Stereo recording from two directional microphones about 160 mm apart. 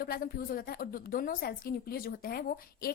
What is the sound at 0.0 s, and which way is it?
A woman's voice, 70° left (ahead or behind).